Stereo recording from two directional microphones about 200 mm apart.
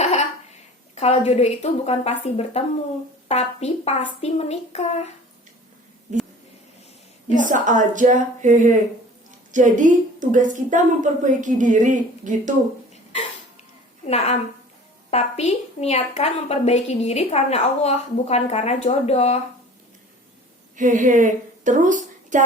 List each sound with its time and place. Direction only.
0.0 s a sound: 35° left (ahead or behind)
0.9 s a woman's voice: 35° left (ahead or behind)
7.3 s a woman's voice: 40° right (ahead or behind)
14.0 s a woman's voice: 30° left (ahead or behind)
20.7 s speech: 40° right (ahead or behind)